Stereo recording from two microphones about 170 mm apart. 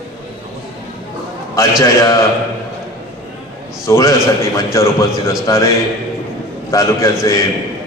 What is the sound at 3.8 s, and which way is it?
A man's voice, 15° left (ahead or behind).